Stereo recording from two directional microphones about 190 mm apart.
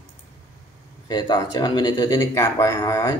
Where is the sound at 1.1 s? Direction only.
20° left (ahead or behind).